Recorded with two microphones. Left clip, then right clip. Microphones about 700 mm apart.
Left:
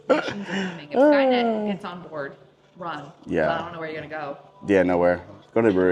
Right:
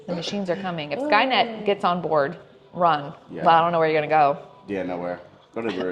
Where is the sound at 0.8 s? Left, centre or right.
Right.